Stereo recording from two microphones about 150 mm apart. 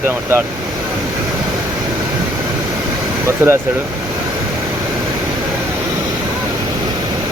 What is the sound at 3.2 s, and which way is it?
Speech, 15° right (ahead or behind).